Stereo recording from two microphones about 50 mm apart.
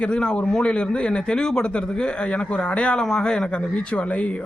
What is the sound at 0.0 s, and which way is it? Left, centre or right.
Speech, centre.